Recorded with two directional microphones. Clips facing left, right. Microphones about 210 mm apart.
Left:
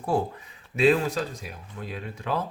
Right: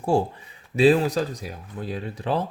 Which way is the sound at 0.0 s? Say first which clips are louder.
Right 4 dB; 30° right (ahead or behind).